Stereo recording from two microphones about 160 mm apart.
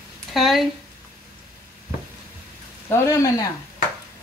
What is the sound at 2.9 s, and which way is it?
Speech, 15° left (ahead or behind).